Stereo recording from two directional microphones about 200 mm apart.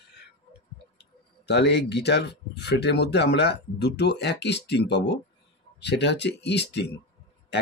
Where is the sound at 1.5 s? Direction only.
55° left (ahead or behind).